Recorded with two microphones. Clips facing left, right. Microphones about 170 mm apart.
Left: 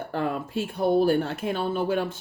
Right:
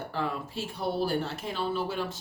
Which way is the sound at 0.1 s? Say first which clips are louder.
Left 7 dB; 55° left (ahead or behind).